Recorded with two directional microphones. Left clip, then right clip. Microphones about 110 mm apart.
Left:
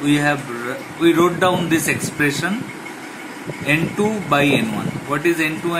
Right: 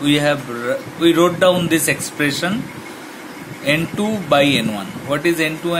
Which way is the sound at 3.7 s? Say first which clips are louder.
Even; 60° right (ahead or behind).